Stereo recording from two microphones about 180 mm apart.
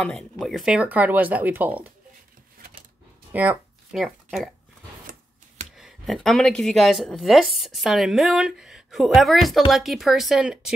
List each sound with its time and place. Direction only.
0.0 s speech: centre (ahead or behind)
3.3 s speech: 5° right (ahead or behind)
5.1 s typewriter: 55° right (ahead or behind)
5.8 s speech: centre (ahead or behind)